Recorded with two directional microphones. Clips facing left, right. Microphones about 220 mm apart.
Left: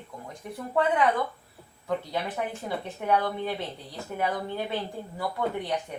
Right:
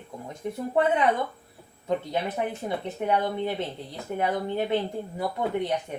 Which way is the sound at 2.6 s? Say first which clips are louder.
Right 2 dB; 20° right (ahead or behind).